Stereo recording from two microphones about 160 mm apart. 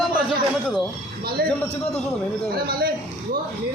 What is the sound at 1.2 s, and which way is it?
Speech, 75° right (ahead or behind).